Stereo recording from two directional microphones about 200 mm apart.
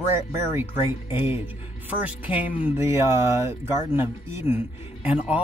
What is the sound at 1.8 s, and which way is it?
Speech, 10° right (ahead or behind).